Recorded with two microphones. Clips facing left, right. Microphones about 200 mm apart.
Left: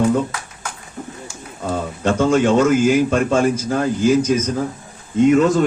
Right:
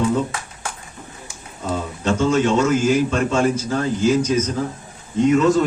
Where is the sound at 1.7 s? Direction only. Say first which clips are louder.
Left 2 dB; 55° left (ahead or behind).